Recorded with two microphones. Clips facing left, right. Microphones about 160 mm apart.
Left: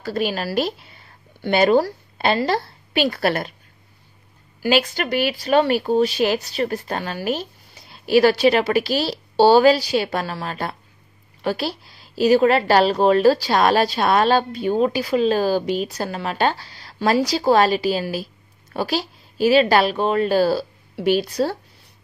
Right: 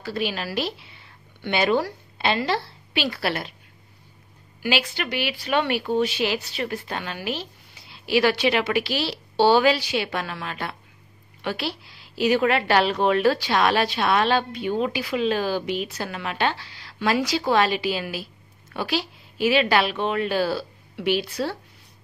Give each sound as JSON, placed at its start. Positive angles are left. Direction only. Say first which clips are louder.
{"t": 0.0, "sound": "a woman's voice", "louder": "left 4 dB", "side_deg": 45}
{"t": 4.6, "sound": "a woman's voice", "louder": "left 6 dB", "side_deg": 45}